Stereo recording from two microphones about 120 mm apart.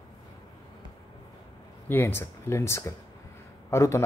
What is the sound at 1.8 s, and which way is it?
Speech, 20° left (ahead or behind).